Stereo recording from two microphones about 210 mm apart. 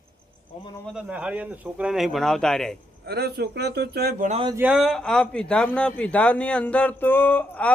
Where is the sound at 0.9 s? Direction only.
5° right (ahead or behind).